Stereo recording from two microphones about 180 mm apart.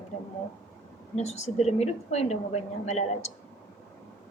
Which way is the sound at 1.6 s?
35° left (ahead or behind).